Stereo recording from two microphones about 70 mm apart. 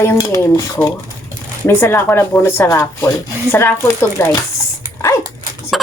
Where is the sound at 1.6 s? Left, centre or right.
Left.